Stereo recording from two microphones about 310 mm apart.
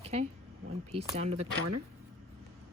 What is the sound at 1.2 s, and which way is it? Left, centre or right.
Speech, right.